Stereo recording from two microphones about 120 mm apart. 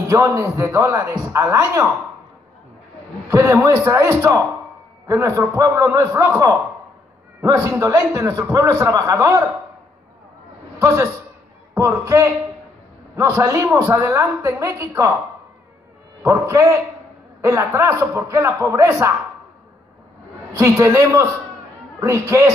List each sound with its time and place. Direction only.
0.1 s a woman's voice: 25° right (ahead or behind)
3.3 s a woman's voice: 25° right (ahead or behind)
10.8 s a man's voice: 25° right (ahead or behind)
16.2 s a woman's voice: 25° right (ahead or behind)
20.5 s a woman's voice: 25° right (ahead or behind)